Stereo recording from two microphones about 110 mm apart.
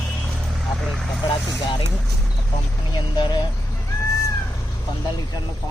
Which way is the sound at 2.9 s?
45° left (ahead or behind).